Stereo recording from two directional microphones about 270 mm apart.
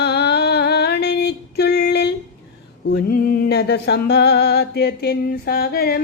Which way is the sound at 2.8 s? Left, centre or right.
Left.